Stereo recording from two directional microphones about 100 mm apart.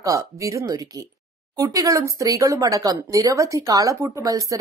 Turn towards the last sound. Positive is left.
turn(degrees=-35)  # may be behind; listen again after turning